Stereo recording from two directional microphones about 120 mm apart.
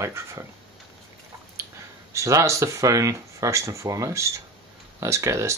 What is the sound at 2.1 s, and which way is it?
Speech, 25° right (ahead or behind).